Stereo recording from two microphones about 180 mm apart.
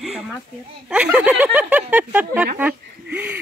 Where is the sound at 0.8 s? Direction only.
5° right (ahead or behind).